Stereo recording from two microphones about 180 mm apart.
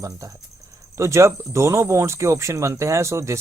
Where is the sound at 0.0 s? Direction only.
20° right (ahead or behind).